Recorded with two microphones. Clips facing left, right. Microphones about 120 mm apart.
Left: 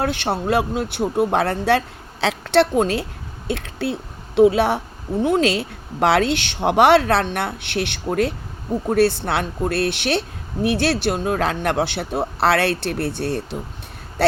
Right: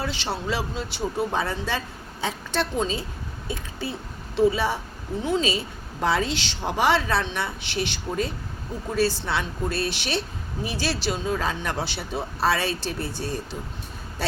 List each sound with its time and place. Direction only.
0.0 s a woman's voice: 55° left (ahead or behind)